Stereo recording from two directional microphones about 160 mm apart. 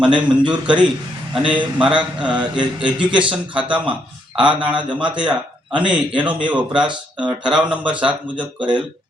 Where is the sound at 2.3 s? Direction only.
30° right (ahead or behind).